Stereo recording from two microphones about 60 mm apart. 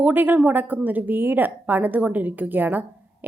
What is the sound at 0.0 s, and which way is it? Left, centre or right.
A woman's voice, right.